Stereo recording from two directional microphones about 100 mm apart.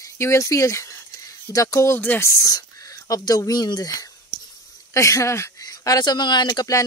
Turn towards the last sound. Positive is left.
turn(degrees=40)  # may be behind; listen again after turning